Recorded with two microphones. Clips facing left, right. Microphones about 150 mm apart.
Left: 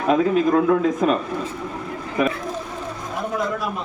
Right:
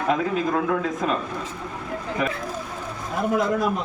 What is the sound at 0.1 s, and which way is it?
Speech, 20° left (ahead or behind).